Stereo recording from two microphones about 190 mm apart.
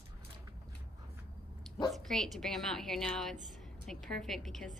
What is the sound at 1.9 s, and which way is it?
A woman's voice, centre (ahead or behind).